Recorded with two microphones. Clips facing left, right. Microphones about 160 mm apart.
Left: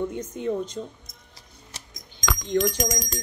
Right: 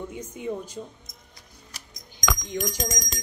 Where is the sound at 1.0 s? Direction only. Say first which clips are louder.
Even; 30° left (ahead or behind).